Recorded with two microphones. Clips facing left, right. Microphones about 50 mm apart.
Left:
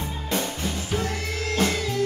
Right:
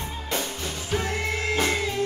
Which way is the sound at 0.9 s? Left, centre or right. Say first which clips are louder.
Right 4 dB; right.